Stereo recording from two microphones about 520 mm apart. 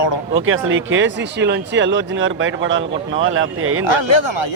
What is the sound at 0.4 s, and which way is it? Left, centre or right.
Speech, right.